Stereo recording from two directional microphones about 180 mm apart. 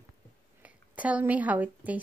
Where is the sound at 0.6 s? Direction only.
10° right (ahead or behind).